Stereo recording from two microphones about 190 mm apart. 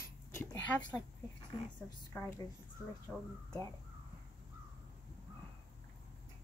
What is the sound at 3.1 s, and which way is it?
Speech, 5° right (ahead or behind).